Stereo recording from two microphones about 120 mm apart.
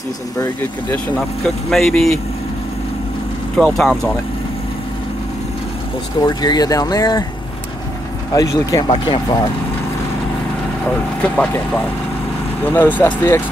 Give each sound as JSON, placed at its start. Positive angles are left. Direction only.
{"t": 1.7, "sound": "speech", "side_deg": 5}
{"t": 3.5, "sound": "speech", "side_deg": 0}
{"t": 6.2, "sound": "speech", "side_deg": 35}
{"t": 8.4, "sound": "speech", "side_deg": 30}
{"t": 11.2, "sound": "speech", "side_deg": 10}